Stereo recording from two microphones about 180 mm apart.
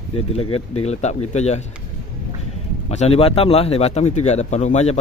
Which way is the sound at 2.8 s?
35° left (ahead or behind).